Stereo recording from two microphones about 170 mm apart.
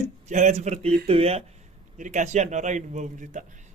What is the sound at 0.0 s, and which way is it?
Speech, 45° right (ahead or behind).